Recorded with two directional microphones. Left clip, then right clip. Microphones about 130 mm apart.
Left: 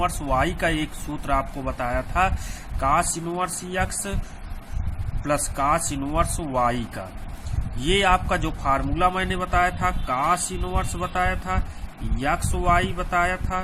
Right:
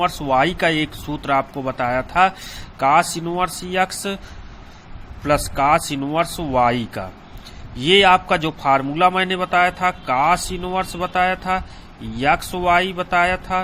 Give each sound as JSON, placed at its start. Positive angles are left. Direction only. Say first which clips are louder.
{"t": 0.0, "sound": "a man's voice", "louder": "right 6 dB", "side_deg": -25}
{"t": 5.2, "sound": "a man's voice", "louder": "right 6 dB", "side_deg": -30}